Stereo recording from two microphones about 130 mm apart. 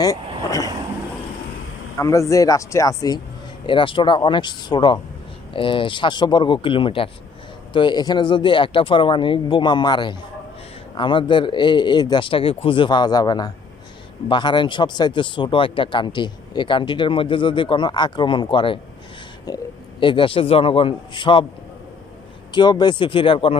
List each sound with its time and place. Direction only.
2.0 s speech: 25° left (ahead or behind)
3.7 s a man's voice: 40° left (ahead or behind)
22.5 s speech: 35° left (ahead or behind)